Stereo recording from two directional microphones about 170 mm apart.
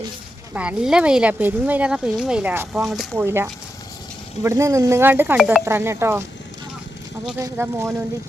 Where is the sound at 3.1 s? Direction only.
15° right (ahead or behind).